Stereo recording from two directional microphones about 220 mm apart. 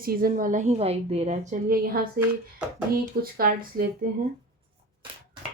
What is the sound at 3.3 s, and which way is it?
Speech, 40° right (ahead or behind).